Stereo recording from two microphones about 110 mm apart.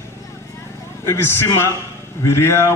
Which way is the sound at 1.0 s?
25° left (ahead or behind).